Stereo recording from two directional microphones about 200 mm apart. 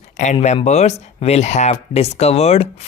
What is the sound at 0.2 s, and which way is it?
Speech, 35° left (ahead or behind).